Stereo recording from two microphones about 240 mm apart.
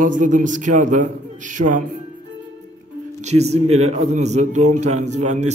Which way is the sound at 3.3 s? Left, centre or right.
Right.